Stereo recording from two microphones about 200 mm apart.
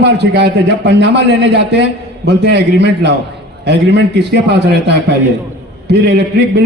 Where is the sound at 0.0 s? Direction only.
55° right (ahead or behind).